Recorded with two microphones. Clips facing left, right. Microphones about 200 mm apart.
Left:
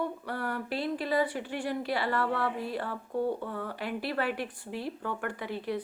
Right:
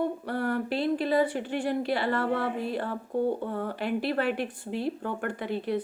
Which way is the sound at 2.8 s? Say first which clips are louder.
Right 3 dB; 45° right (ahead or behind).